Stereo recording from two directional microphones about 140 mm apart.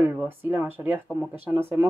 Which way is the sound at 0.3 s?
15° right (ahead or behind).